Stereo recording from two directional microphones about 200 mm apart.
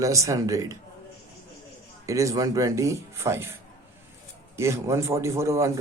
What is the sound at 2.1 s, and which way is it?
Speech, 15° right (ahead or behind).